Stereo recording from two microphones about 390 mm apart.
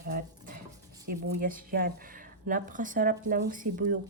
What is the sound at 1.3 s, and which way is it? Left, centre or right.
Speech, right.